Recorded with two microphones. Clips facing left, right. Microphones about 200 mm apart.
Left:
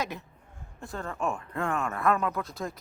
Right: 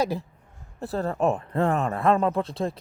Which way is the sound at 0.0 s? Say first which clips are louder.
Right 8 dB; 30° right (ahead or behind).